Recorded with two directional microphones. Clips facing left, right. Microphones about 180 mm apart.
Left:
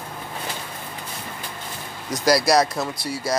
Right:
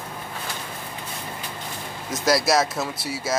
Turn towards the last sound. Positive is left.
turn(degrees=-5)  # may be behind; listen again after turning